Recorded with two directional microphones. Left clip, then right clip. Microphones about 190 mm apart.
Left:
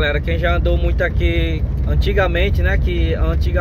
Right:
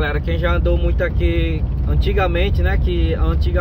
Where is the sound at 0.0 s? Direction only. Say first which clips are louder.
Left 2 dB; 15° right (ahead or behind).